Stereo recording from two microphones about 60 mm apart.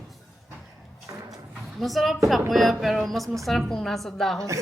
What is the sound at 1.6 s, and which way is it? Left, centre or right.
A woman's voice, centre.